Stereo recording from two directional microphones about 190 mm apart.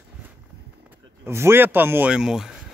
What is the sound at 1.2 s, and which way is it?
Speech, 15° right (ahead or behind).